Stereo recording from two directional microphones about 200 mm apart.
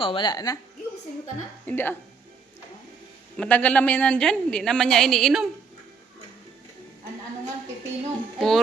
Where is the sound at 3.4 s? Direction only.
5° left (ahead or behind).